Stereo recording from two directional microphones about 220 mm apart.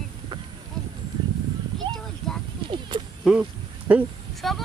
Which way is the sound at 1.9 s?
20° right (ahead or behind).